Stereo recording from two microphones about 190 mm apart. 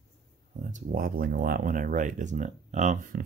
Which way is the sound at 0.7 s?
50° right (ahead or behind).